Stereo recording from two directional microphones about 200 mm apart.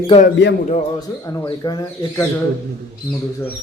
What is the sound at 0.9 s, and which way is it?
Speech, 20° left (ahead or behind).